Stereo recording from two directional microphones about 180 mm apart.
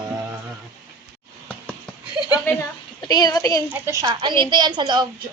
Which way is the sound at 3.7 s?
15° right (ahead or behind).